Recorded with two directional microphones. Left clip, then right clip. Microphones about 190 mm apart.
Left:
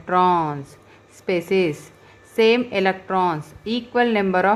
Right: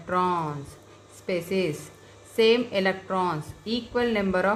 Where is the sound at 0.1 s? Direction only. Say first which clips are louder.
Left 8 dB; 35° left (ahead or behind).